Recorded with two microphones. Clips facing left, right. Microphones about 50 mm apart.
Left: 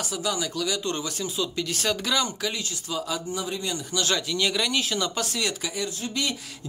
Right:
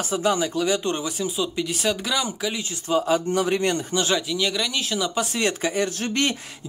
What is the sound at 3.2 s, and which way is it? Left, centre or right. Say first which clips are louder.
Speech: right 9 dB; right.